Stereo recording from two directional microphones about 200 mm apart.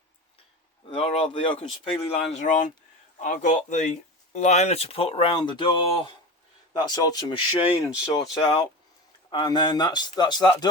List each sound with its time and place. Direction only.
0.9 s a man's voice: 30° left (ahead or behind)
6.7 s a man's voice: 20° left (ahead or behind)